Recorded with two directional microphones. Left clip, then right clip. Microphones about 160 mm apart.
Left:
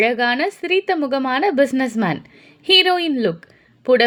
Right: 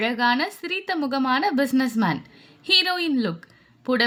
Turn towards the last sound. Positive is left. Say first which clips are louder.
# left 10 dB
turn(degrees=15)  # may be behind; listen again after turning